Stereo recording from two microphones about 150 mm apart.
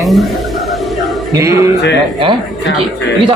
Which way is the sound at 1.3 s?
20° right (ahead or behind).